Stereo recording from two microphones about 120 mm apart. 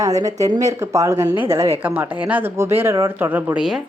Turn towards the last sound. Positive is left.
turn(degrees=-15)  # may be behind; listen again after turning